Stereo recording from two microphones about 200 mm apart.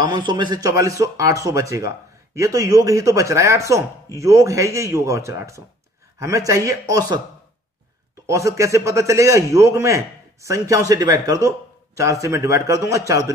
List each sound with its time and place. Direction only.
0.3 s a man's voice: 20° right (ahead or behind)
8.3 s a man's voice: 15° right (ahead or behind)